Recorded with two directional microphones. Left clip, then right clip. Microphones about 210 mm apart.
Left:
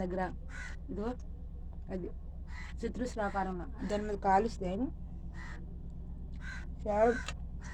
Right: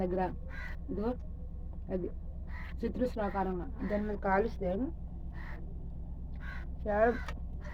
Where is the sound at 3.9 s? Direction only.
35° left (ahead or behind).